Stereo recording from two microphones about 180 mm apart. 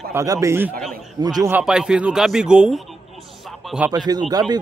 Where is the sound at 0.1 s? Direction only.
15° right (ahead or behind).